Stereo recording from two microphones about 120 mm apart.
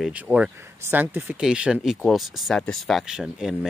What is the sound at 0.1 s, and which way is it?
Speech, 10° right (ahead or behind).